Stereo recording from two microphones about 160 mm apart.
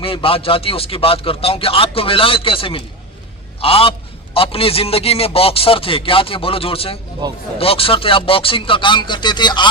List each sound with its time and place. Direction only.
0.0 s a man's voice: 35° left (ahead or behind)
7.2 s speech: 25° right (ahead or behind)
7.6 s a man's voice: 35° left (ahead or behind)